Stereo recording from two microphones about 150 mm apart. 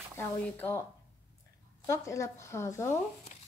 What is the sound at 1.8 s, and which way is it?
A woman's voice, 20° left (ahead or behind).